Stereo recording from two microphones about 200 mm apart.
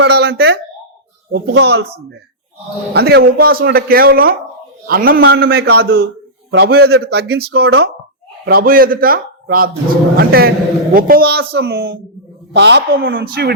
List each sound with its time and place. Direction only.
0.0 s a sound: 55° right (ahead or behind)
1.3 s speech: 60° right (ahead or behind)
2.9 s a man's voice: 55° right (ahead or behind)